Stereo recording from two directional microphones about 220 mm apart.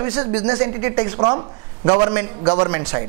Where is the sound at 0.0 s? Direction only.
25° right (ahead or behind).